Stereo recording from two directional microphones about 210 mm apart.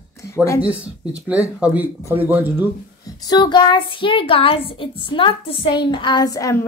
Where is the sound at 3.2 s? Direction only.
20° left (ahead or behind).